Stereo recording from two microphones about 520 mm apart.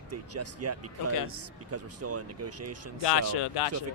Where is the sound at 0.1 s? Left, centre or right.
Right.